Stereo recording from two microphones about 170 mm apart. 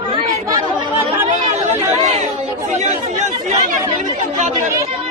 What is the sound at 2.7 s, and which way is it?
Chatter, 45° right (ahead or behind).